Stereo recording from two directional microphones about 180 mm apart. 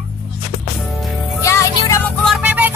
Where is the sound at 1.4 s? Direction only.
15° left (ahead or behind).